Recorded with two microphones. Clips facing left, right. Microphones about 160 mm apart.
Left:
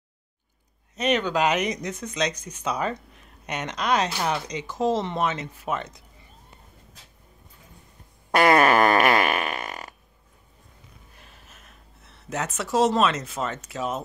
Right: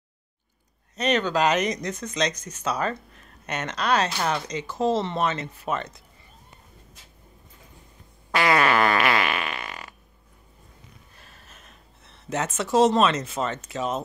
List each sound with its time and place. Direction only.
0.9 s speech: 10° left (ahead or behind)
8.3 s fart: 45° left (ahead or behind)
11.1 s a sound: 15° left (ahead or behind)
12.0 s speech: centre (ahead or behind)